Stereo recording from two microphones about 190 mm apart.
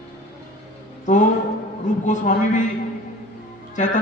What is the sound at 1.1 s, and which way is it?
A man's voice, 45° left (ahead or behind).